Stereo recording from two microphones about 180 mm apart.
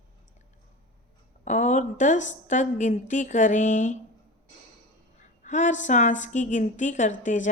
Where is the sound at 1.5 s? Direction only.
40° left (ahead or behind).